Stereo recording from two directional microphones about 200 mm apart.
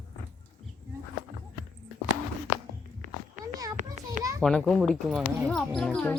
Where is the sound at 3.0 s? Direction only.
35° right (ahead or behind).